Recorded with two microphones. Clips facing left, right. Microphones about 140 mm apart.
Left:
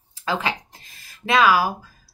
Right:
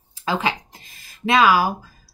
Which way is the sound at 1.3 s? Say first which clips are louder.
Right 1 dB; 20° right (ahead or behind).